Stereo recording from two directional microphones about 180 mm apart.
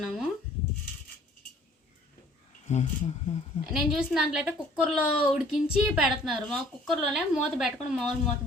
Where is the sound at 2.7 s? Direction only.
40° left (ahead or behind).